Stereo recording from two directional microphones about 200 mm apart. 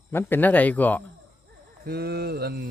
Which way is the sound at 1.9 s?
50° right (ahead or behind).